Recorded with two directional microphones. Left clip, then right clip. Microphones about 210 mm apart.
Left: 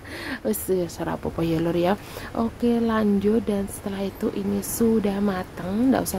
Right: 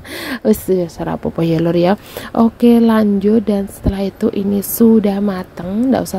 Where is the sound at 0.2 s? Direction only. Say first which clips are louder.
Right 12 dB; 35° right (ahead or behind).